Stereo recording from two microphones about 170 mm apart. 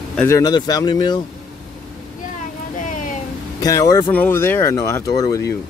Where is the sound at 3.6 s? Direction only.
20° left (ahead or behind).